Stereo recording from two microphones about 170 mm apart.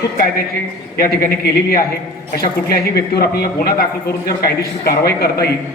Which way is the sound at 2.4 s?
70° left (ahead or behind).